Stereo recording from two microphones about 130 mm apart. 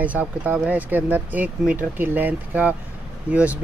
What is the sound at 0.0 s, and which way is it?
Speech, 10° right (ahead or behind).